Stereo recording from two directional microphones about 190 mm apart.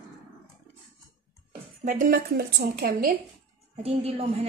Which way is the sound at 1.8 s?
40° right (ahead or behind).